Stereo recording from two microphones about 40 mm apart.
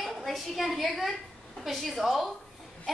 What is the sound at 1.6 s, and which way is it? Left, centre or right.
Speech, centre.